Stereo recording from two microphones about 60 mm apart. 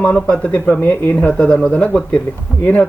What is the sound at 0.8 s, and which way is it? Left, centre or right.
Speech, left.